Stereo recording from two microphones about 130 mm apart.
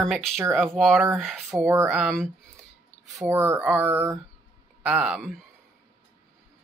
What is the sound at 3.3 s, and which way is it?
Speech, 20° right (ahead or behind).